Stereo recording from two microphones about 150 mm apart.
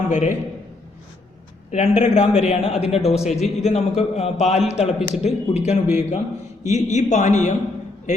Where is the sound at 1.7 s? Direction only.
50° left (ahead or behind).